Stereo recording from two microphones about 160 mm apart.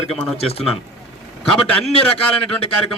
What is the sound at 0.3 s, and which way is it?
Speech, 40° left (ahead or behind).